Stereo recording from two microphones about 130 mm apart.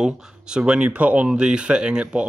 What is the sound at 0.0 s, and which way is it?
A man's voice, 5° right (ahead or behind).